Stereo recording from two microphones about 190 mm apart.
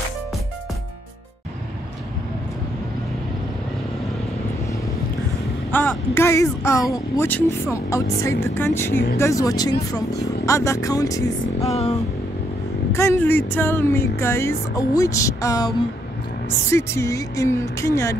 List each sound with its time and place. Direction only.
5.7 s speech: 10° left (ahead or behind)
12.9 s speech: 15° left (ahead or behind)
16.7 s speech: 15° left (ahead or behind)